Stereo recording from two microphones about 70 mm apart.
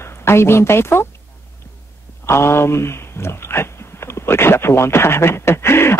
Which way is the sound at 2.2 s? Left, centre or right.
Left.